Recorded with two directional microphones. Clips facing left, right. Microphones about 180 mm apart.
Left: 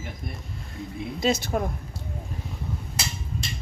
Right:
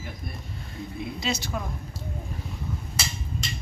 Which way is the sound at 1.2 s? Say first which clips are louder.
Left 8 dB; 50° left (ahead or behind).